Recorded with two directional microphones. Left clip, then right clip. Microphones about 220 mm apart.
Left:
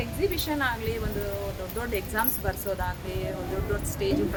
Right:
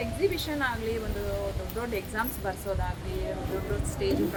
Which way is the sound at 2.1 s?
20° left (ahead or behind).